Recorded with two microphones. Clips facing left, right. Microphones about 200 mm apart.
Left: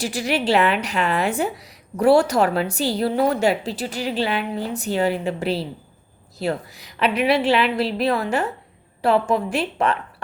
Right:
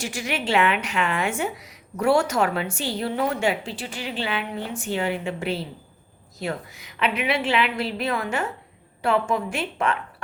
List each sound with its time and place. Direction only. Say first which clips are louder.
0.0 s a woman's voice: left 6 dB; 35° left (ahead or behind)